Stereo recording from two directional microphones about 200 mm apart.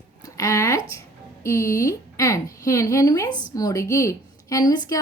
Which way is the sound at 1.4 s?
15° left (ahead or behind).